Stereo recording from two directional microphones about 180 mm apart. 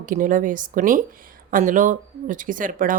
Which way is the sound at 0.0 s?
45° right (ahead or behind).